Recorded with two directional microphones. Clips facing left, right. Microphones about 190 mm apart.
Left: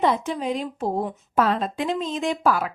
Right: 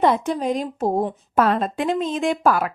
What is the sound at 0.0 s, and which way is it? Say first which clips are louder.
Speech: right 3 dB; 55° right (ahead or behind).